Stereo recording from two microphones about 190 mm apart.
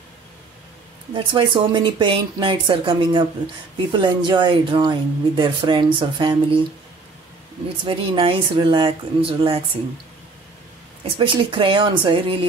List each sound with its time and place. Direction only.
1.1 s speech: 25° right (ahead or behind)
7.8 s speech: 25° right (ahead or behind)
11.1 s speech: 25° right (ahead or behind)